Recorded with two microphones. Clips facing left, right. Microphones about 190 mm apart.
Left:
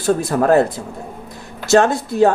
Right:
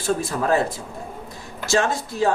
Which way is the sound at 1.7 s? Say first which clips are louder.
Left 8 dB; 60° left (ahead or behind).